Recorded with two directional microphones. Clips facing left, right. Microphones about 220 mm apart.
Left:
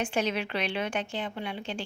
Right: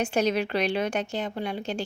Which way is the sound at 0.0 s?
40° right (ahead or behind).